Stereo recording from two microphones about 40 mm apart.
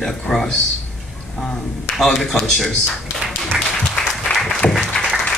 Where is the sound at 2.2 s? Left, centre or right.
Centre.